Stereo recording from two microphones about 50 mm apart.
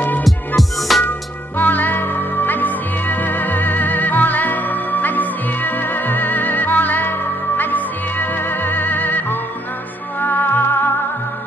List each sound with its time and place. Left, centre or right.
0.6 s music: centre
1.6 s music: left